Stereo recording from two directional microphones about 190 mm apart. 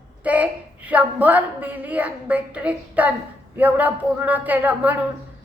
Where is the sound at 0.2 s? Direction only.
10° right (ahead or behind).